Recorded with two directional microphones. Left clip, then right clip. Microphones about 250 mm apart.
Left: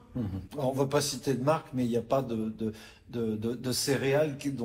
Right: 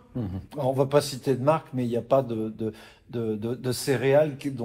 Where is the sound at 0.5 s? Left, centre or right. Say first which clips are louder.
Right 6 dB; right.